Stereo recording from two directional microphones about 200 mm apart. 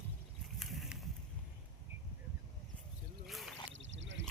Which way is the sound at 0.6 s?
Centre (ahead or behind).